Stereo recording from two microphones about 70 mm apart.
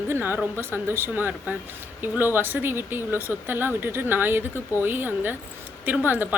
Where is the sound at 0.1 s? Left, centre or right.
Right.